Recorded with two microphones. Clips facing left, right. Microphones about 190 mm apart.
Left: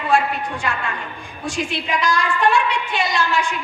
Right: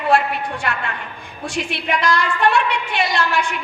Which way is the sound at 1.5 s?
60° right (ahead or behind).